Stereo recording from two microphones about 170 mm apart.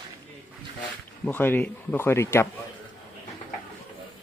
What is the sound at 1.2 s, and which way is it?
Speech, 10° left (ahead or behind).